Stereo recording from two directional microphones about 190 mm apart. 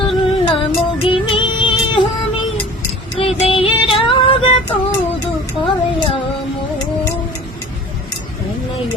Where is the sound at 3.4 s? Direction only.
30° left (ahead or behind).